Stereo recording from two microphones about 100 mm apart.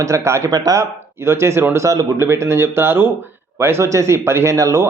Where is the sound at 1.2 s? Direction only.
25° right (ahead or behind).